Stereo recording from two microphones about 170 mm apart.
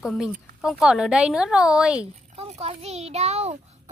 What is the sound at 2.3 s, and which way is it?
A child's voice, 35° right (ahead or behind).